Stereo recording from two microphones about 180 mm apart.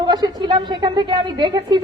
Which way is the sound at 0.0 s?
25° right (ahead or behind).